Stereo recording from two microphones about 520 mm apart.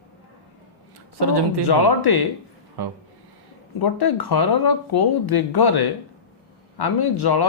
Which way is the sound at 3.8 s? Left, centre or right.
Left.